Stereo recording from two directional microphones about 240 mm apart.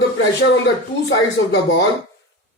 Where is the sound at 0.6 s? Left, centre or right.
Left.